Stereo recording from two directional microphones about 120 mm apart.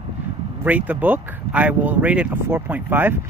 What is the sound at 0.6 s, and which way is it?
Speech, 15° right (ahead or behind).